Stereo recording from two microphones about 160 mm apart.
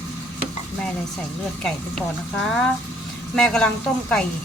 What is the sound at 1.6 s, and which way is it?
Speech, 5° left (ahead or behind).